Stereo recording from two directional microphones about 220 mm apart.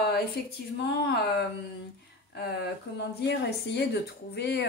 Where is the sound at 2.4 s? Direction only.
50° left (ahead or behind).